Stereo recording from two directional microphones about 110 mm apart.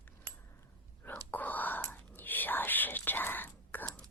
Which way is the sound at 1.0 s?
15° left (ahead or behind).